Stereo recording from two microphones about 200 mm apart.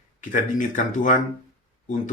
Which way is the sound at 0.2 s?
40° left (ahead or behind).